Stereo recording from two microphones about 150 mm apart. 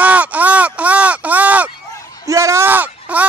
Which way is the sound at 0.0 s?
10° right (ahead or behind).